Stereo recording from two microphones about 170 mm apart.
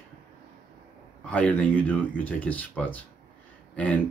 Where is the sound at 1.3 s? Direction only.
10° left (ahead or behind).